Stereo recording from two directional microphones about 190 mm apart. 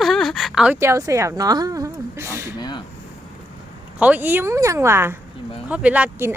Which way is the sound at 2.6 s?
25° left (ahead or behind).